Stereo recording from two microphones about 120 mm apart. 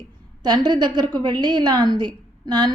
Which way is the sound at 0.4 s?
35° right (ahead or behind).